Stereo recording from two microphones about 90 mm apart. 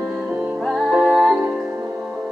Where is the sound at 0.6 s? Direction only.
Centre (ahead or behind).